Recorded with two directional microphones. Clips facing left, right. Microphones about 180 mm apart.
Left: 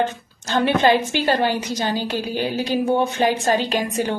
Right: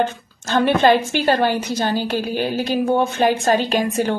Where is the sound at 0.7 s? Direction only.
15° left (ahead or behind).